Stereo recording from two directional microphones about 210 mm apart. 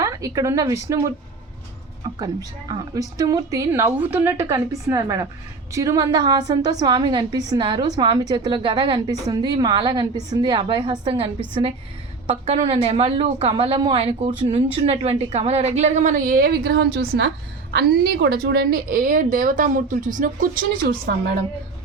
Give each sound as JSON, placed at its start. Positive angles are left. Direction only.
{"t": 0.0, "sound": "speech", "side_deg": -15}
{"t": 2.1, "sound": "a woman's voice", "side_deg": -20}
{"t": 12.3, "sound": "a woman's voice", "side_deg": -30}